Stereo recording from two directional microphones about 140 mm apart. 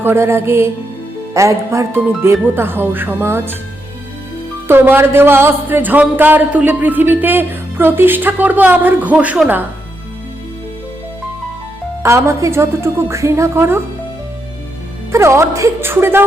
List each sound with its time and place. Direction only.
0.0 s speech: 15° right (ahead or behind)
4.7 s speech: 15° right (ahead or behind)
12.0 s a woman's voice: 20° right (ahead or behind)
15.1 s a woman's voice: 20° right (ahead or behind)